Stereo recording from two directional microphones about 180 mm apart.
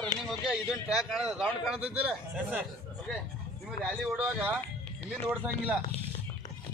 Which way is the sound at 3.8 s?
Centre (ahead or behind).